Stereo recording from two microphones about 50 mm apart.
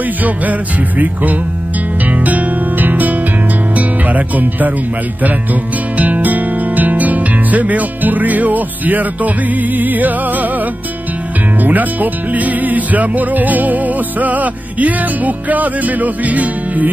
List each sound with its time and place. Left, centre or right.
0.2 s music: right
3.7 s speech: right
11.6 s music: right